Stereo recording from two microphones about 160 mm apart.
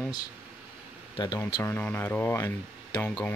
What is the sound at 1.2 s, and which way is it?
Speech, 30° left (ahead or behind).